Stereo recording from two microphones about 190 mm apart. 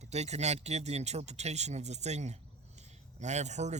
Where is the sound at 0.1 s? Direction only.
35° right (ahead or behind).